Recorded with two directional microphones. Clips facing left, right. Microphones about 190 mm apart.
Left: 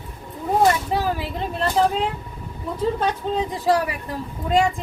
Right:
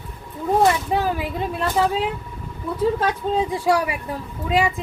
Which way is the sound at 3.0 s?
10° right (ahead or behind).